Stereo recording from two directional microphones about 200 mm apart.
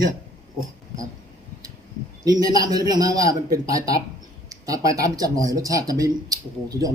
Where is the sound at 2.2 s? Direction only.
20° right (ahead or behind).